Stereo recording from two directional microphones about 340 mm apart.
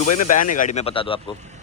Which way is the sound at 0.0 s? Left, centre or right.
Left.